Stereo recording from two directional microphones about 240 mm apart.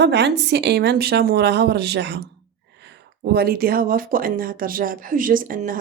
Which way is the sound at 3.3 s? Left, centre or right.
Right.